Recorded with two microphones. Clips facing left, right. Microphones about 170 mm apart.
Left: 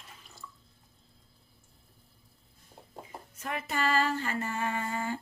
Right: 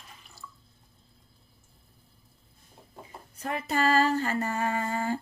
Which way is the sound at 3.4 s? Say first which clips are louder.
Right 5 dB; 35° right (ahead or behind).